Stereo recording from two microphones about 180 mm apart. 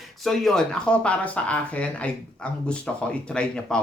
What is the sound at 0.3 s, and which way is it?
Speech, centre (ahead or behind).